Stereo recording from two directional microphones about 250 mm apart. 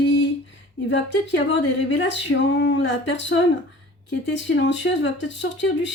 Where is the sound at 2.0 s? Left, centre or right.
Left.